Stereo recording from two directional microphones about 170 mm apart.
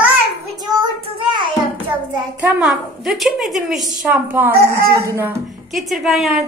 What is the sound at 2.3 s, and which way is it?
A woman's voice, 10° right (ahead or behind).